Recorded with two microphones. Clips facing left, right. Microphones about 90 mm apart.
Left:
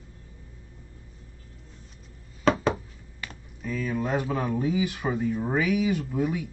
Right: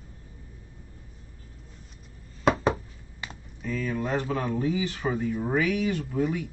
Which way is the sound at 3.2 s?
20° right (ahead or behind).